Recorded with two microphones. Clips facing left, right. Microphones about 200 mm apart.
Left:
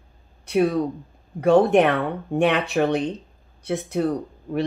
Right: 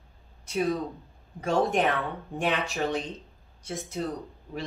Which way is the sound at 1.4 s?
55° left (ahead or behind).